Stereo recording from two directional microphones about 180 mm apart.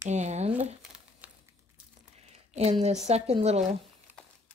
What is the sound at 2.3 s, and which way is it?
A woman's voice, 35° right (ahead or behind).